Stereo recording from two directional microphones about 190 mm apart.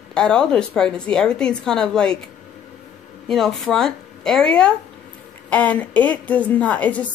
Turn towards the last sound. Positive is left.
turn(degrees=5)  # may be behind; listen again after turning